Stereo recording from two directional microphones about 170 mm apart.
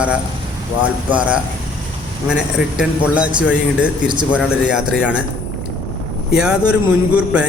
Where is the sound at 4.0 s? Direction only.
25° right (ahead or behind).